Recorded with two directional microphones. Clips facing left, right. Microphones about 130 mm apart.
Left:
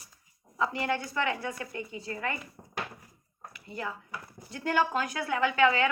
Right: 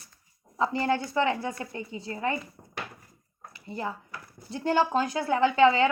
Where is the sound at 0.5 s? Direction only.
30° right (ahead or behind).